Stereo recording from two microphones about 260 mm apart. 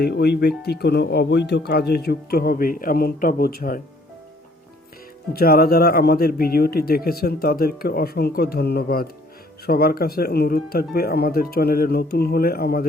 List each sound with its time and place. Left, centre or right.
0.0 s speech: left
5.3 s speech: left